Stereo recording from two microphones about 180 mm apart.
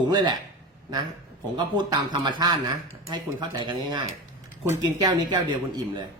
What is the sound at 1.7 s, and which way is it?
Speech, 25° right (ahead or behind).